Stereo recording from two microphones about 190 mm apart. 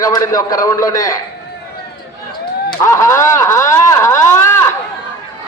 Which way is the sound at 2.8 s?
15° left (ahead or behind).